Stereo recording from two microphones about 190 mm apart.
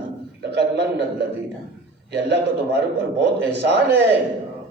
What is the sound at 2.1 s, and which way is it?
Speech, 65° right (ahead or behind).